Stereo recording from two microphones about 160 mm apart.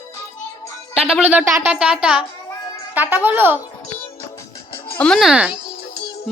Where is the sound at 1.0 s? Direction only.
5° right (ahead or behind).